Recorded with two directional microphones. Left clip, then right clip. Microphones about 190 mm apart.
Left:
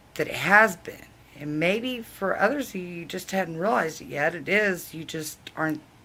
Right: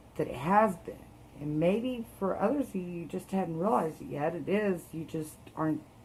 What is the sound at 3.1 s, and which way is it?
Speech, 10° left (ahead or behind).